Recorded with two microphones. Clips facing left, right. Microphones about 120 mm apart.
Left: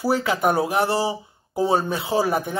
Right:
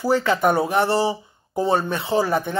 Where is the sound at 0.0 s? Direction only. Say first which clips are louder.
Right 2 dB; 10° left (ahead or behind).